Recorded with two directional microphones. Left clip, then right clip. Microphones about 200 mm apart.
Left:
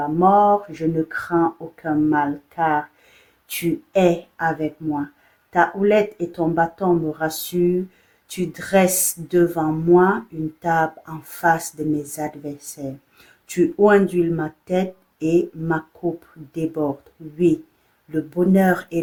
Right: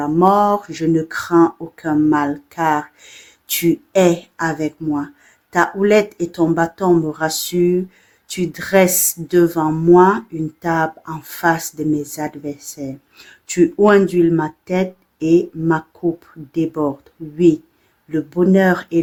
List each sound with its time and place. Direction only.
0.0 s speech: 35° right (ahead or behind)
18.1 s speech: 35° right (ahead or behind)